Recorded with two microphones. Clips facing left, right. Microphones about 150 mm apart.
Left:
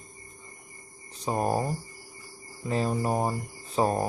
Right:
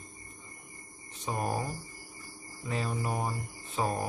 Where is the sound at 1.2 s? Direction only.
35° left (ahead or behind).